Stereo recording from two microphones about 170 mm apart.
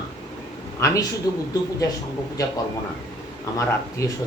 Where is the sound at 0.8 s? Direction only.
20° left (ahead or behind).